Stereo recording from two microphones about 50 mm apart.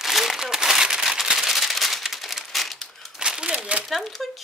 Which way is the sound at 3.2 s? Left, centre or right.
Centre.